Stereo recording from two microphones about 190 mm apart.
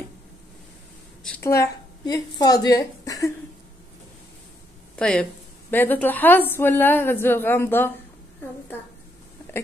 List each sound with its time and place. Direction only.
1.4 s a woman's voice: 15° left (ahead or behind)
4.9 s a woman's voice: 5° left (ahead or behind)